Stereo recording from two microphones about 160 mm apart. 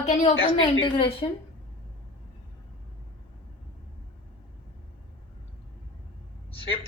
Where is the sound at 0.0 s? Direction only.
45° left (ahead or behind).